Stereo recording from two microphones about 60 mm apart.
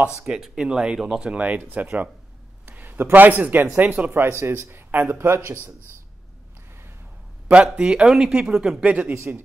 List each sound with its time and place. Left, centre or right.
0.1 s speech: centre
4.1 s speech: right
7.4 s speech: centre
8.8 s speech: right